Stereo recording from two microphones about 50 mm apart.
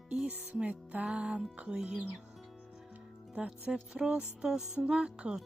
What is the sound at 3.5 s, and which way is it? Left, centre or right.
Music, centre.